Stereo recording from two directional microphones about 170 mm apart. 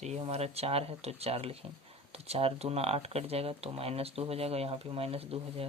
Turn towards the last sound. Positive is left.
turn(degrees=-35)  # may be behind; listen again after turning